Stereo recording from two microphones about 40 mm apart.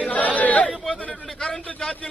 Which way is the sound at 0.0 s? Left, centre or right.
Left.